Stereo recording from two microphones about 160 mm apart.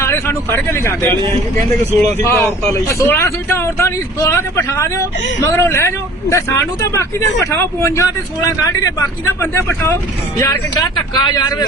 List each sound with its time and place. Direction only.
0.0 s a man's voice: 15° left (ahead or behind)
2.2 s a man's voice: 15° left (ahead or behind)